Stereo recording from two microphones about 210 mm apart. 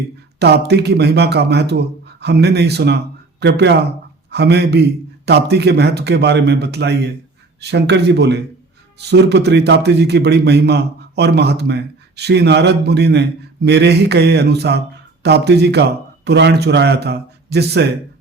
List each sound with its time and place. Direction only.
0.3 s a man's voice: 50° right (ahead or behind)